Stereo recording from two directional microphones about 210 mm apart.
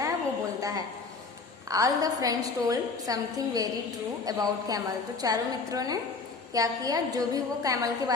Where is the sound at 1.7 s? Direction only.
15° right (ahead or behind).